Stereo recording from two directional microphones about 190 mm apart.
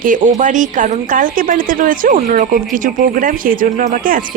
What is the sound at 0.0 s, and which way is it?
Speech, 45° right (ahead or behind).